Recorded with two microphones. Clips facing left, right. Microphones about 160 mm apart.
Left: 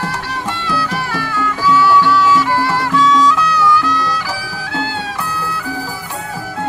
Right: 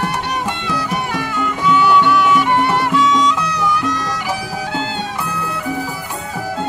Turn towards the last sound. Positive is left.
turn(degrees=-20)  # may be behind; listen again after turning